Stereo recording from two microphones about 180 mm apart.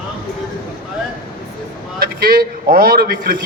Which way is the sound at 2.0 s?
55° right (ahead or behind).